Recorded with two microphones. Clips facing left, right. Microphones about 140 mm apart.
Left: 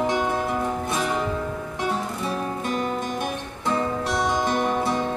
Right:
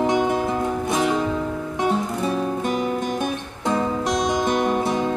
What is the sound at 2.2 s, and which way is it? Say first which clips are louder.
Music: right 4 dB; 20° right (ahead or behind).